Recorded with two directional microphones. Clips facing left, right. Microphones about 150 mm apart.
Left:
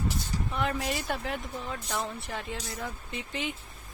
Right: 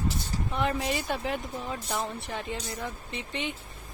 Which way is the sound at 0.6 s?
Centre (ahead or behind).